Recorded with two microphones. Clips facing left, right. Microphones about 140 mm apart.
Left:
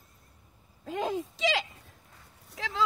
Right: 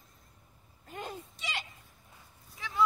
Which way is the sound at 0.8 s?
90° left.